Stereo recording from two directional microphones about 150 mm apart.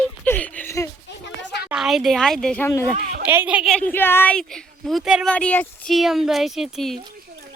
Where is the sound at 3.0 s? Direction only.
75° right (ahead or behind).